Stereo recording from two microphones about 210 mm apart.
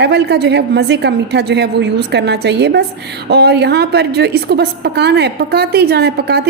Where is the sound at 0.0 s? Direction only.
50° right (ahead or behind).